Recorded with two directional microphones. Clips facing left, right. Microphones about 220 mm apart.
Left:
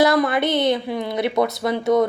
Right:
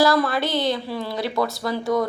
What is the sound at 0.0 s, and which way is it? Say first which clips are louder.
Speech: left 2 dB; 20° left (ahead or behind).